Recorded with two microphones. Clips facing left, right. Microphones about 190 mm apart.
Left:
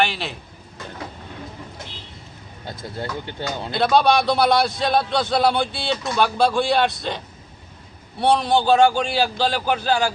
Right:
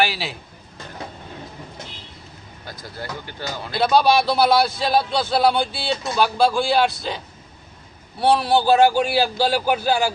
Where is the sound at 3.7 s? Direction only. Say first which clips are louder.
Even; centre (ahead or behind).